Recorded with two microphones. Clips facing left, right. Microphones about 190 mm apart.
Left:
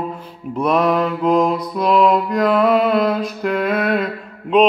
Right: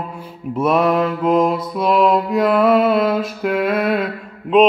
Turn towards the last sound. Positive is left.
turn(degrees=-5)  # may be behind; listen again after turning